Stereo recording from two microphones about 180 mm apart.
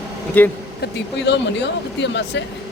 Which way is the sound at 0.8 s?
75° left (ahead or behind).